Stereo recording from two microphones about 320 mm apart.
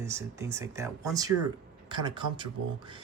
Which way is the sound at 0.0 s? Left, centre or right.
Centre.